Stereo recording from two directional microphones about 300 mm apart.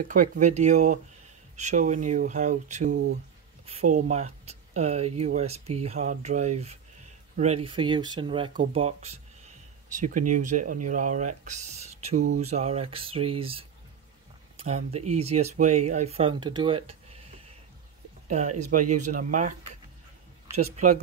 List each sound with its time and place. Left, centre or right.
0.1 s speech: right